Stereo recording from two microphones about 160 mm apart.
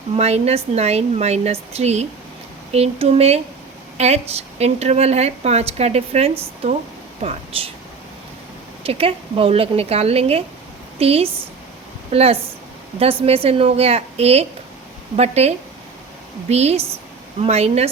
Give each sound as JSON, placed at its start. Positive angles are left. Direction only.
{"t": 0.2, "sound": "speech", "side_deg": -40}
{"t": 8.8, "sound": "speech", "side_deg": -35}